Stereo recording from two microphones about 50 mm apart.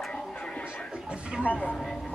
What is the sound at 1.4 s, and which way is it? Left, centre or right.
Speech, left.